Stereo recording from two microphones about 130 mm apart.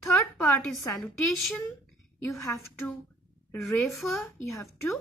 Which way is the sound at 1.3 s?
5° left (ahead or behind).